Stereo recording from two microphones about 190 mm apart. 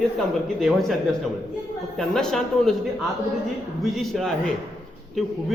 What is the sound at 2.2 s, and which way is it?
Speech, 5° left (ahead or behind).